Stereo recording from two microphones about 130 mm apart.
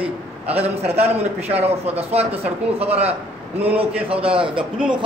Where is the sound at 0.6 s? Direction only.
50° right (ahead or behind).